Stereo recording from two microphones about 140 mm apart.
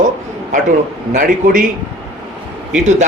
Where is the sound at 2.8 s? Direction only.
55° right (ahead or behind).